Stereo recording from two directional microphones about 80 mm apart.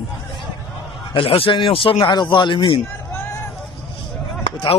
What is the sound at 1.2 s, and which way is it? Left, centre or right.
Speech, left.